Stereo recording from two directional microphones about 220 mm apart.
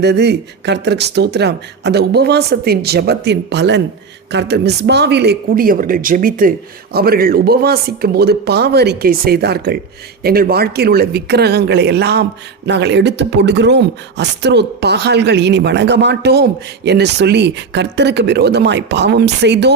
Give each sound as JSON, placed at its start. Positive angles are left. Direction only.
{"t": 0.0, "sound": "speech", "side_deg": -50}